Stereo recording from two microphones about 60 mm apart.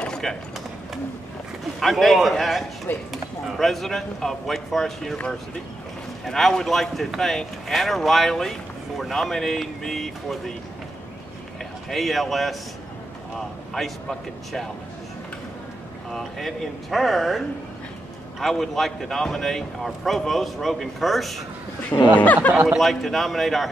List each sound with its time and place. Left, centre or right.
0.0 s mechanisms: centre
1.8 s speech: centre
6.2 s speech: centre
11.9 s speech: centre
16.1 s speech: centre
18.4 s speech: centre
21.9 s speech: left
22.8 s speech: centre